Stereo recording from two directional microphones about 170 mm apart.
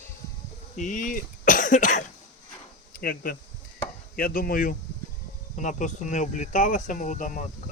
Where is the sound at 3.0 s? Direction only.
60° left (ahead or behind).